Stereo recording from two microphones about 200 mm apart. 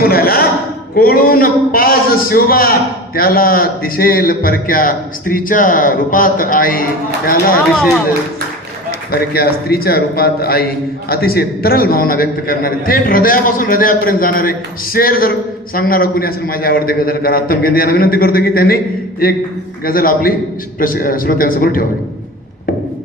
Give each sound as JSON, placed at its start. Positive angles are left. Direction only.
{"t": 0.0, "sound": "a man's voice", "side_deg": 50}
{"t": 9.1, "sound": "a man's voice", "side_deg": 50}
{"t": 19.8, "sound": "a man's voice", "side_deg": 45}